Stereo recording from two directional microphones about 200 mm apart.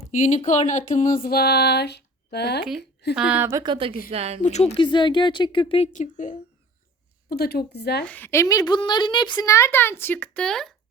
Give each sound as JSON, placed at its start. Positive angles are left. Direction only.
{"t": 0.2, "sound": "a sound", "side_deg": 35}
{"t": 3.2, "sound": "speech", "side_deg": -5}
{"t": 3.6, "sound": "speech", "side_deg": -25}
{"t": 4.4, "sound": "speech", "side_deg": 35}
{"t": 7.3, "sound": "a sound", "side_deg": 50}
{"t": 8.0, "sound": "a woman's voice", "side_deg": 10}